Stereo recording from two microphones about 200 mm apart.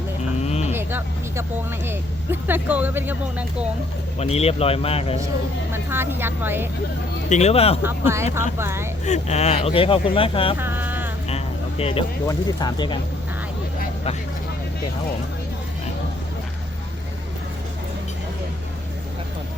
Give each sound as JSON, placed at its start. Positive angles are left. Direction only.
{"t": 0.4, "sound": "vehicle", "side_deg": 30}
{"t": 0.7, "sound": "speech", "side_deg": -10}
{"t": 4.2, "sound": "speech", "side_deg": 30}
{"t": 5.7, "sound": "speech", "side_deg": -10}
{"t": 7.3, "sound": "speech", "side_deg": 35}
{"t": 7.8, "sound": "speech", "side_deg": -10}
{"t": 9.0, "sound": "speech", "side_deg": 35}
{"t": 10.6, "sound": "a sound", "side_deg": -10}
{"t": 11.3, "sound": "vehicle", "side_deg": 30}
{"t": 12.3, "sound": "speech", "side_deg": 20}